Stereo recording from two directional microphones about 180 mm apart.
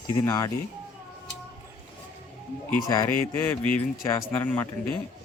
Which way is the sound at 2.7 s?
15° left (ahead or behind).